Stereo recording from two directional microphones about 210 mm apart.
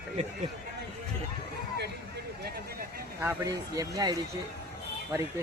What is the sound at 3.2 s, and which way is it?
Speech, 15° right (ahead or behind).